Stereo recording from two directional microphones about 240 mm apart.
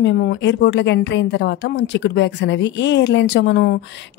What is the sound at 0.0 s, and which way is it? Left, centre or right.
A woman's voice, left.